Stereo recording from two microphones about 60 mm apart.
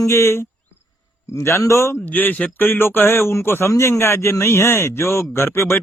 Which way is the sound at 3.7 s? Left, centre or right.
Left.